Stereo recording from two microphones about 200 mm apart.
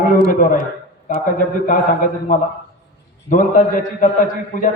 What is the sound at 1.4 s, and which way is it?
A man's voice, 40° left (ahead or behind).